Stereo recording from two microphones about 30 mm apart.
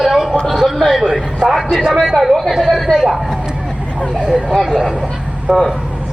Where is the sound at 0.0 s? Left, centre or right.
Centre.